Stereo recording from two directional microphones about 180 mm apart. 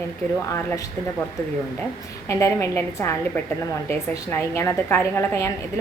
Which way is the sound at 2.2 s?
15° left (ahead or behind).